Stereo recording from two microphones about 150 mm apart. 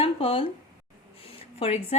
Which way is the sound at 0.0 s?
40° left (ahead or behind).